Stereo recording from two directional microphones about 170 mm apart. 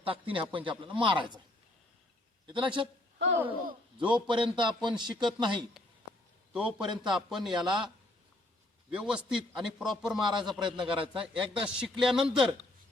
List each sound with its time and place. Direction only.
0.0 s speech: 30° right (ahead or behind)
2.5 s speech: 30° right (ahead or behind)
3.9 s speech: 30° right (ahead or behind)
6.5 s a man's voice: 5° right (ahead or behind)
6.8 s speech: 30° right (ahead or behind)
7.2 s a man's voice: centre (ahead or behind)
7.5 s speech: 25° right (ahead or behind)
8.9 s a man's voice: 5° right (ahead or behind)
10.2 s speech: 25° right (ahead or behind)
11.3 s a man's voice: 5° right (ahead or behind)